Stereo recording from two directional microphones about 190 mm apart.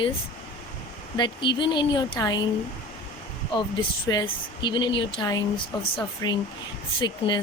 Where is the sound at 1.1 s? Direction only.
25° left (ahead or behind).